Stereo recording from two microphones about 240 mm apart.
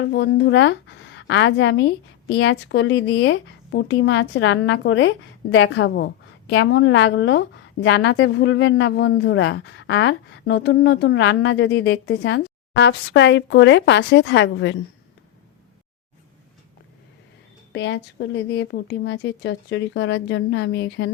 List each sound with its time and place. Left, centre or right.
0.1 s a woman's voice: left
17.7 s a woman's voice: left